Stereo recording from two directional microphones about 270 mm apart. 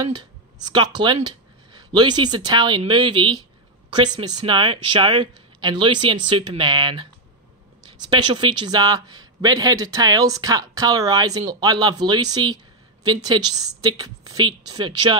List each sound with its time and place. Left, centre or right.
0.0 s speech: centre